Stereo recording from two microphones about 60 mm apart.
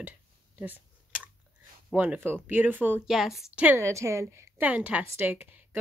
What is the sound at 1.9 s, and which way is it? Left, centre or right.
Speech, right.